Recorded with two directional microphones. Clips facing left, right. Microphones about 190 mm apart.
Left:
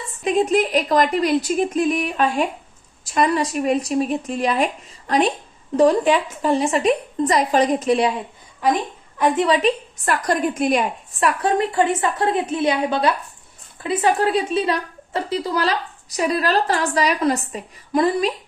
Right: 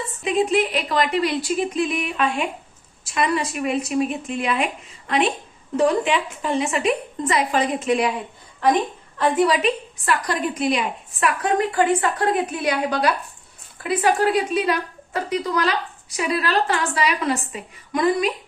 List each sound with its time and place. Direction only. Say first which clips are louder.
0.3 s a woman's voice: left 2 dB; 40° left (ahead or behind)
10.1 s a woman's voice: left 3 dB; 45° left (ahead or behind)
11.2 s a woman's voice: left 2 dB; 30° left (ahead or behind)